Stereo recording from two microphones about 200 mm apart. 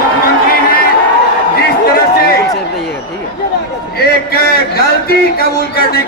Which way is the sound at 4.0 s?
50° left (ahead or behind).